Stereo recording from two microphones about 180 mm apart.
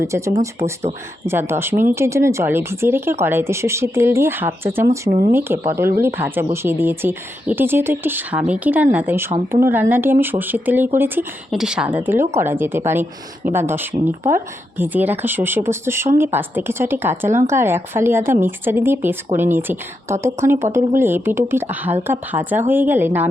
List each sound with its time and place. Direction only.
0.0 s speech: 15° right (ahead or behind)